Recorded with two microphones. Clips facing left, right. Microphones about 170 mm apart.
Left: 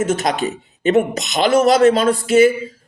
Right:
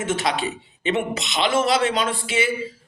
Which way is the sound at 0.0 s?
40° left (ahead or behind).